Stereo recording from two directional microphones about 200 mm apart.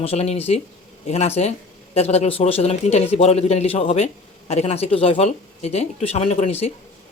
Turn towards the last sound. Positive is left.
turn(degrees=30)  # may be behind; listen again after turning